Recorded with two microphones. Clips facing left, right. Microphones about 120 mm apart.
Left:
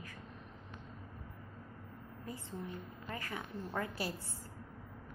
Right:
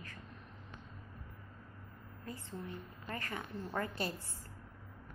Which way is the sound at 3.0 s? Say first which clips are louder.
Right 1 dB; 5° left (ahead or behind).